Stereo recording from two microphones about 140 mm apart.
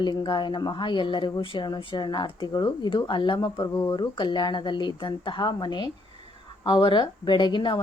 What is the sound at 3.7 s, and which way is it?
Speech, 20° left (ahead or behind).